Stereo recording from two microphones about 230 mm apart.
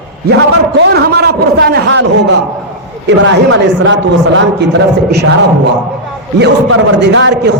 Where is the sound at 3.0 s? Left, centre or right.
Right.